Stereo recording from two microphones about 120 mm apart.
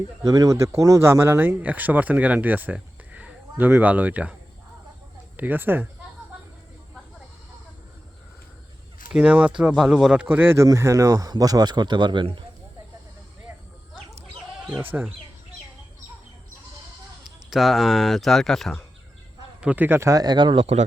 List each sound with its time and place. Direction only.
0.2 s speech: 30° right (ahead or behind); by 4.4 s 10° right (ahead or behind)
5.4 s speech: 15° right (ahead or behind)
9.1 s speech: 10° right (ahead or behind); by 12.4 s 45° right (ahead or behind)
14.8 s speech: 15° right (ahead or behind)
17.5 s speech: centre (ahead or behind)
19.6 s speech: 15° right (ahead or behind)
20.2 s speech: 40° right (ahead or behind)